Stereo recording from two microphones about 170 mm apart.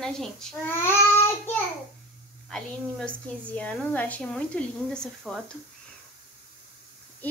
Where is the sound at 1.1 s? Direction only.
15° left (ahead or behind).